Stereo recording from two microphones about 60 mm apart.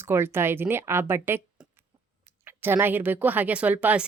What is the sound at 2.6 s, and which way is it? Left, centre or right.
Speech, right.